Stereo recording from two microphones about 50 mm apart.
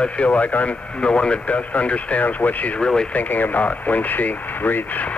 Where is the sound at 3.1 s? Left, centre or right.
Left.